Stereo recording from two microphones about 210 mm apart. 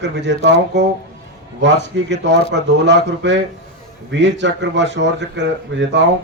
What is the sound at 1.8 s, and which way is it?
A man's voice, 55° right (ahead or behind).